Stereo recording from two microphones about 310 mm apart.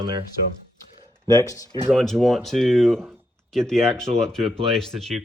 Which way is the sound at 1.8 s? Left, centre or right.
Centre.